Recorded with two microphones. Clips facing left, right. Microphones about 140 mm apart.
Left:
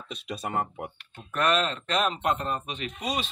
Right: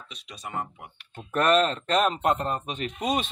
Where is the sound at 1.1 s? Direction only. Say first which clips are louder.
Right 4 dB; 45° right (ahead or behind).